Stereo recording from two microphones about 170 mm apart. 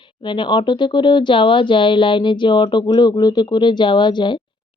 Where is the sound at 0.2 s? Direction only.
30° left (ahead or behind).